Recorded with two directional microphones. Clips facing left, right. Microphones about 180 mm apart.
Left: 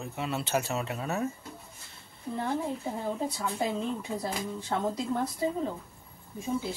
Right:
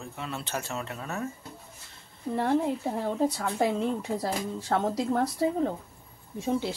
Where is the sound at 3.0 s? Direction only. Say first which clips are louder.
Right 5 dB; 75° right (ahead or behind).